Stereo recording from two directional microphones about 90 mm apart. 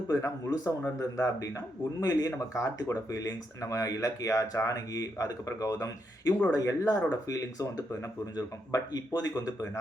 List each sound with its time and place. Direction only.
0.1 s a man's voice: 35° left (ahead or behind)